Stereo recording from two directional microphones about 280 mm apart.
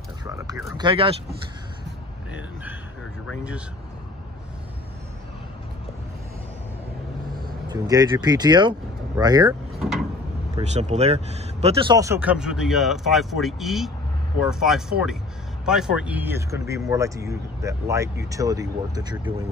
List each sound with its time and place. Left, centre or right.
0.2 s a sound: centre
0.6 s speech: centre
3.3 s speech: centre
7.6 s speech: centre
9.8 s a sound: centre
10.6 s speech: right